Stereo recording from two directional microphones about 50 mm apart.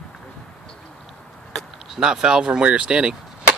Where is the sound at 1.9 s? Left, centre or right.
Centre.